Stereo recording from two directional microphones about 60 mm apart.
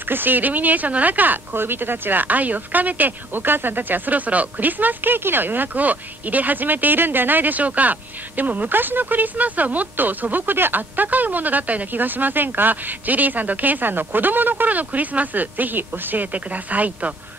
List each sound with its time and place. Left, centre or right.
0.1 s speech: right